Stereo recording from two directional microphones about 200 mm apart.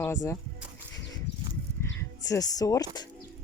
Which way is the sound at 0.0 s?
15° left (ahead or behind).